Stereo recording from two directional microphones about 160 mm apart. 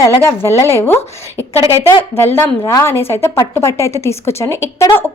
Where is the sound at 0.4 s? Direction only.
15° left (ahead or behind).